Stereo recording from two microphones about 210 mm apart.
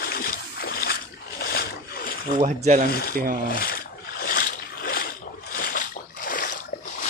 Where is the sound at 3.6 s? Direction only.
45° left (ahead or behind).